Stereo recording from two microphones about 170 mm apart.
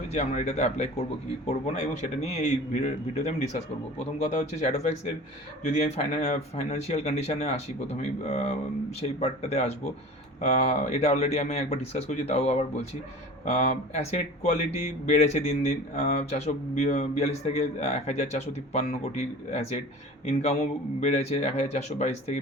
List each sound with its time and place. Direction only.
0.1 s speech: 45° left (ahead or behind)